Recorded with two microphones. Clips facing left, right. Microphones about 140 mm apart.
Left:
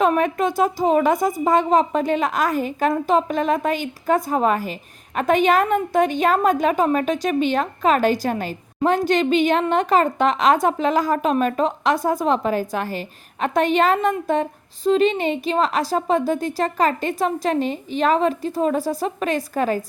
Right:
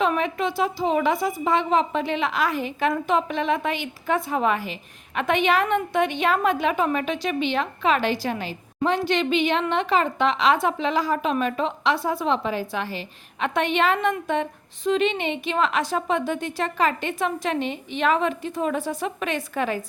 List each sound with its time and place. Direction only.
0.0 s a woman's voice: 45° left (ahead or behind)